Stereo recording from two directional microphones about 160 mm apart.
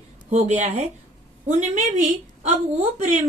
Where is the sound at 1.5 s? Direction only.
50° right (ahead or behind).